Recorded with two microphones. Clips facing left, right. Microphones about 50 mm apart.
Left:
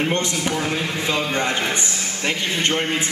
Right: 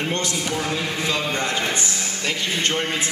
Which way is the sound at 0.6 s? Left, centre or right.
Centre.